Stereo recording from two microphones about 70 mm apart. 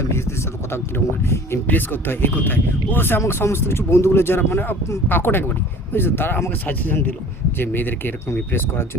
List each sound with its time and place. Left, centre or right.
0.1 s speech: left
1.6 s speech: left